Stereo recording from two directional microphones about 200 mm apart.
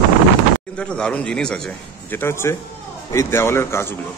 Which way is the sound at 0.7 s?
5° left (ahead or behind).